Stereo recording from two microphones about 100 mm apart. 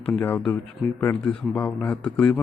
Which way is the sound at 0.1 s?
20° left (ahead or behind).